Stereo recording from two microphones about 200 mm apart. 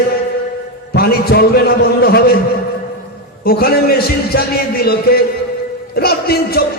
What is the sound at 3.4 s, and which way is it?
A man's voice, 50° left (ahead or behind).